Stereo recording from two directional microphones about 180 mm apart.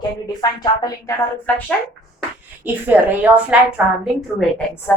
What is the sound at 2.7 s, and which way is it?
Speech, 10° right (ahead or behind).